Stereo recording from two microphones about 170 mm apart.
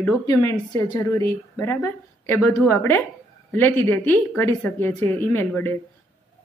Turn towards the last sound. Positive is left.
turn(degrees=15)  # may be behind; listen again after turning